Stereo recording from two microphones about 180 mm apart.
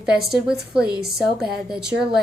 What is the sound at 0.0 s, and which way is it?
A woman's voice, 5° right (ahead or behind).